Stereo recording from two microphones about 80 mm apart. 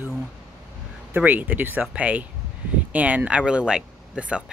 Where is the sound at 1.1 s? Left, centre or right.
Right.